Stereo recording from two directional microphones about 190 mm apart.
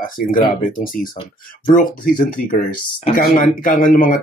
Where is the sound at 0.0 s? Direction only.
45° left (ahead or behind).